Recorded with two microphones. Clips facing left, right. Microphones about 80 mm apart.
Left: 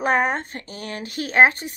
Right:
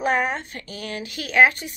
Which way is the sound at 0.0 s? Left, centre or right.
Left.